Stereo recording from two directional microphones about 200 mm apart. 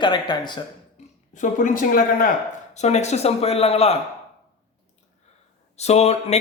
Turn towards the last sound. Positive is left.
turn(degrees=30)  # may be behind; listen again after turning